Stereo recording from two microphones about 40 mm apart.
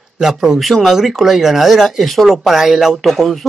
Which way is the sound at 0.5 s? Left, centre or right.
Centre.